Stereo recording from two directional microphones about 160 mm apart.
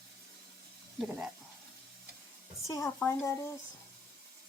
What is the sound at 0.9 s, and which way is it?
Speech, centre (ahead or behind).